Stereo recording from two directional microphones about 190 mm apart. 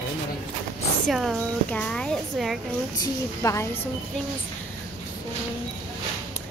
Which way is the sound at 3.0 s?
15° left (ahead or behind).